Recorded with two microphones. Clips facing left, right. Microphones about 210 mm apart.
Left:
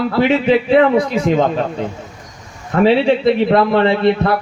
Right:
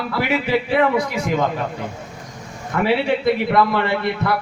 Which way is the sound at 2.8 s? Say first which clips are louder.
Left 6 dB; 25° left (ahead or behind).